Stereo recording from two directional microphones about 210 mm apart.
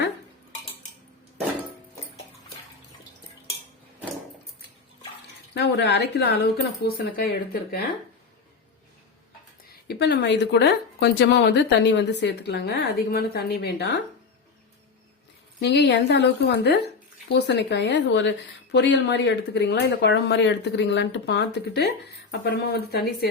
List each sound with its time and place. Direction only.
5.5 s speech: 55° left (ahead or behind)
9.8 s speech: 50° left (ahead or behind)
15.6 s a woman's voice: 55° left (ahead or behind)